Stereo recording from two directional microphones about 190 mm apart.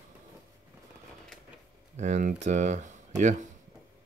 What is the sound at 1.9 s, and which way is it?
Speech, 40° right (ahead or behind).